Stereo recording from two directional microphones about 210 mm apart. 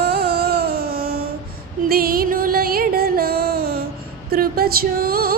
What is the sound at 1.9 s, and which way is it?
Music, 45° right (ahead or behind).